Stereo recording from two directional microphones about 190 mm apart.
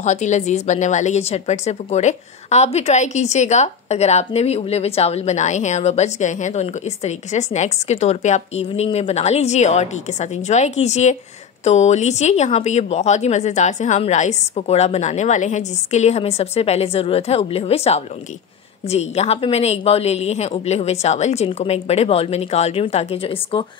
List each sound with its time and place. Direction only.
0.0 s a woman's voice: 40° left (ahead or behind)